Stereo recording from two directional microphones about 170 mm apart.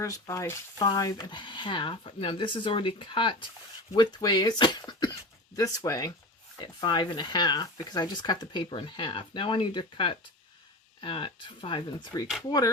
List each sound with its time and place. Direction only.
0.0 s speech: 20° left (ahead or behind)